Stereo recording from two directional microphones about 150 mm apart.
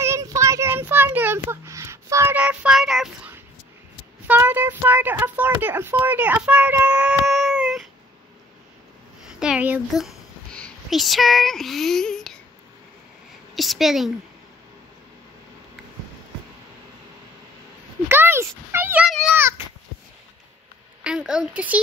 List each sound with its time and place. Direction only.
0.0 s child singing: 20° right (ahead or behind); by 3.3 s centre (ahead or behind)
4.3 s speech: 10° right (ahead or behind)
7.5 s a sound: centre (ahead or behind)
9.3 s a woman's voice: 5° right (ahead or behind)
9.9 s a sound: centre (ahead or behind)
10.6 s speech: centre (ahead or behind)
13.6 s speech: centre (ahead or behind)
18.0 s a sound: 15° right (ahead or behind)
21.0 s speech: 5° right (ahead or behind)